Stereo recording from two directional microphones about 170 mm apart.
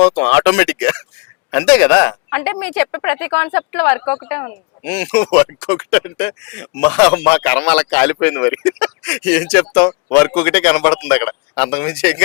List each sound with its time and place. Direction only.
0.2 s speech: 10° left (ahead or behind)